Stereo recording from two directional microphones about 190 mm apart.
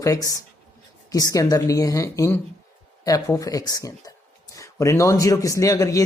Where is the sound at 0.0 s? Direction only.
15° left (ahead or behind).